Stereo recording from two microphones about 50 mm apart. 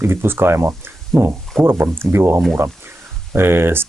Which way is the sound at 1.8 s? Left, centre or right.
Right.